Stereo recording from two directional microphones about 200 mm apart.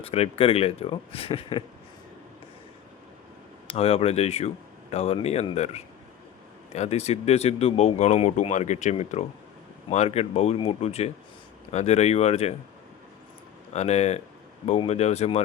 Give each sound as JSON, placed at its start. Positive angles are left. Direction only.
{"t": 0.0, "sound": "speech", "side_deg": 30}
{"t": 3.7, "sound": "speech", "side_deg": 30}
{"t": 13.7, "sound": "speech", "side_deg": 35}